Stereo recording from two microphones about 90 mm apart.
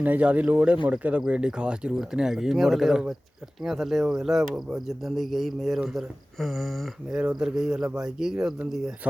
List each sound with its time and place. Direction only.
0.0 s speech: 15° right (ahead or behind)